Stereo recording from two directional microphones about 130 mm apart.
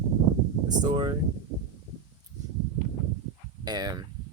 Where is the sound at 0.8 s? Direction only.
35° right (ahead or behind).